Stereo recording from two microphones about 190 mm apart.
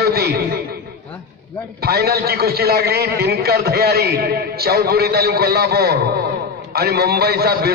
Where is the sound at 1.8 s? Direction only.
55° right (ahead or behind).